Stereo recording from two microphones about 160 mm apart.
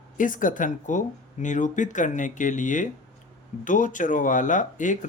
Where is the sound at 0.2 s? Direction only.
55° left (ahead or behind).